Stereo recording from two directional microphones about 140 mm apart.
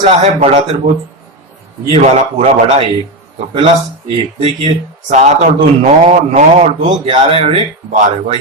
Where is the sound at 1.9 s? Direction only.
50° right (ahead or behind).